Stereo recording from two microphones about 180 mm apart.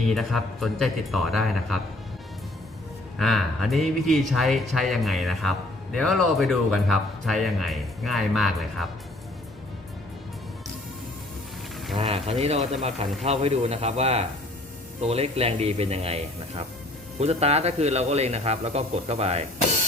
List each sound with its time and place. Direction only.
0.1 s speech: centre (ahead or behind)
3.2 s speech: centre (ahead or behind)
11.9 s a sound: 35° right (ahead or behind)
13.2 s speech: 35° right (ahead or behind)